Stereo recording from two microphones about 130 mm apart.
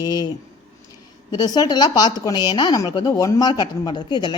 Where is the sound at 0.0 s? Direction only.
30° left (ahead or behind).